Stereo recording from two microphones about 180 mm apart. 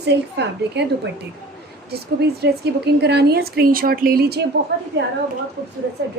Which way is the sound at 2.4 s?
65° right (ahead or behind).